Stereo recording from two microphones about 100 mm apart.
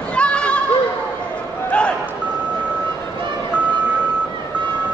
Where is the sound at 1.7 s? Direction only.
10° left (ahead or behind).